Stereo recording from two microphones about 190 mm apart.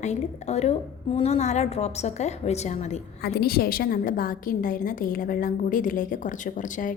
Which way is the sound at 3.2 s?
55° left (ahead or behind).